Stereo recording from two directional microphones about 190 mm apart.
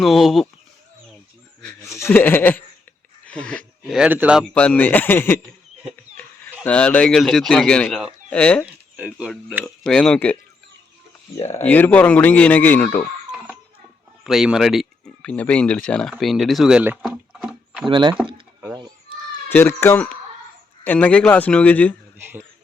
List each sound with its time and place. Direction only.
0.0 s speech: centre (ahead or behind)
1.6 s a man's voice: 15° left (ahead or behind); by 4.4 s 5° right (ahead or behind)
4.5 s a man's voice: 10° left (ahead or behind)
8.6 s speech: 5° right (ahead or behind)
11.3 s speech: 35° left (ahead or behind)
11.6 s a man's voice: 10° left (ahead or behind)
14.3 s speech: centre (ahead or behind)
17.8 s speech: 25° right (ahead or behind)
18.7 s children playing: 20° right (ahead or behind)
19.5 s a man's voice: 10° left (ahead or behind)
22.2 s speech: 10° right (ahead or behind)